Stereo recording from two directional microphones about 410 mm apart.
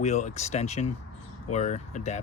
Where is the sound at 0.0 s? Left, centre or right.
Centre.